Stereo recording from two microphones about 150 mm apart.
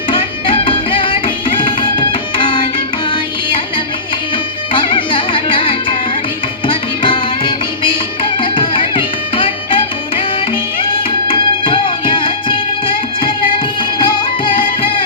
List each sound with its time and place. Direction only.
0.1 s music: 35° left (ahead or behind)
4.7 s music: 35° left (ahead or behind)